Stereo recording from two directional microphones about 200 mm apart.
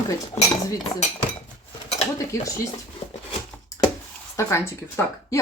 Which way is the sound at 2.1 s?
15° left (ahead or behind).